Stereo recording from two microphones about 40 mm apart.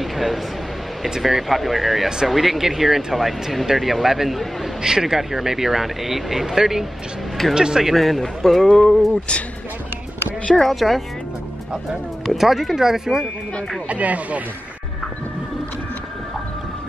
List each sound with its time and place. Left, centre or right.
0.0 s a sound: centre
1.2 s speech: centre
7.9 s speech: centre
10.7 s speech: centre
12.3 s speech: centre
13.8 s speech: right